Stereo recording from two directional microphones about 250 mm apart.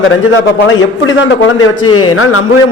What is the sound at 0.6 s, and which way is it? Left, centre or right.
A man's voice, left.